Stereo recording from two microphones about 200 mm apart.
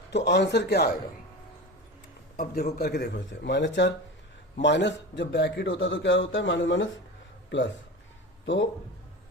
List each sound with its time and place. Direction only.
0.1 s a man's voice: 60° left (ahead or behind)
2.3 s a man's voice: 45° left (ahead or behind); by 7.7 s 65° left (ahead or behind)